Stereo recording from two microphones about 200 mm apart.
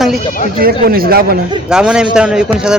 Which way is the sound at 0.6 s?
50° right (ahead or behind).